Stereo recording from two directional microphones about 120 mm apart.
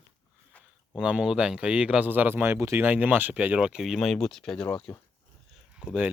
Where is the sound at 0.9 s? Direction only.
5° right (ahead or behind).